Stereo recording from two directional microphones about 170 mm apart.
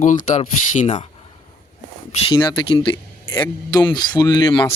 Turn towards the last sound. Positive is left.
turn(degrees=25)  # may be behind; listen again after turning